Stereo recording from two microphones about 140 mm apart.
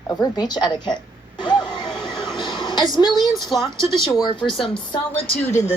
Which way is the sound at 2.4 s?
35° left (ahead or behind).